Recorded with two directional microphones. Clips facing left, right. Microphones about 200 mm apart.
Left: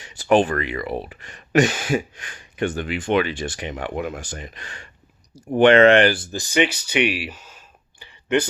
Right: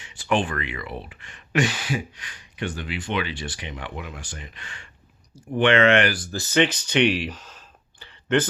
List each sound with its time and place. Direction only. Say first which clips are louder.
0.0 s speech: left 7 dB; 40° left (ahead or behind); by 8.4 s 10° left (ahead or behind)